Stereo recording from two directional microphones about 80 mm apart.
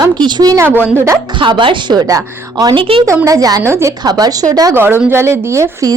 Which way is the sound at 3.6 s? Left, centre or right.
Right.